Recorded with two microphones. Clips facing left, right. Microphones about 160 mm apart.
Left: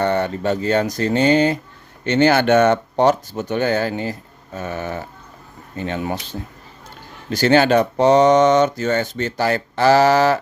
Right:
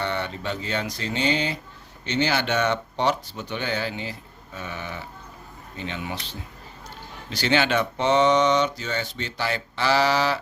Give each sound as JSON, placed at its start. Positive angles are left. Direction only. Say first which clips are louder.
{"t": 0.0, "sound": "speech", "louder": "left 9 dB", "side_deg": 45}
{"t": 7.3, "sound": "speech", "louder": "left 8 dB", "side_deg": 45}